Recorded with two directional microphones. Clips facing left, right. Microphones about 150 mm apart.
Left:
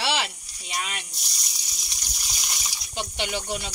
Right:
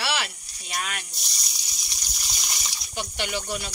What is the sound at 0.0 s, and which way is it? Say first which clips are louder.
Snake: left 2 dB; 25° left (ahead or behind).